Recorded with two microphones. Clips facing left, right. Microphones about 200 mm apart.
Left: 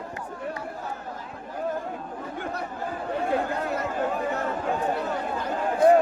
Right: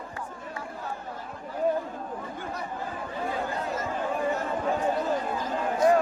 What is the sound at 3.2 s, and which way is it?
Chatter, 60° left (ahead or behind).